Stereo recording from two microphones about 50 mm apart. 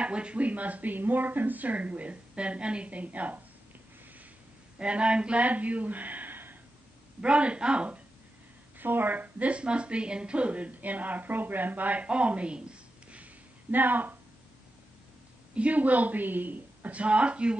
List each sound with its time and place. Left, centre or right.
0.0 s a woman's voice: right
4.7 s speech: right
7.2 s a woman's voice: right
8.7 s a woman's voice: right
13.7 s a woman's voice: right
15.5 s a woman's voice: right